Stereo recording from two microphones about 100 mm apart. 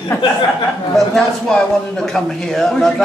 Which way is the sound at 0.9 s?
5° left (ahead or behind).